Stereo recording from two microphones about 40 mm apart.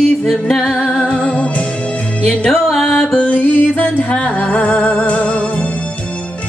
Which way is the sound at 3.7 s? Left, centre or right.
Left.